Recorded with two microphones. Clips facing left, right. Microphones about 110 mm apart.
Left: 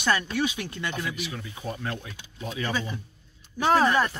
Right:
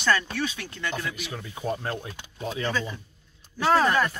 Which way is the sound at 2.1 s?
60° right (ahead or behind).